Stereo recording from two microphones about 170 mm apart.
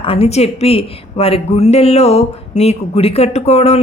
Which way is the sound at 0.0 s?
35° left (ahead or behind).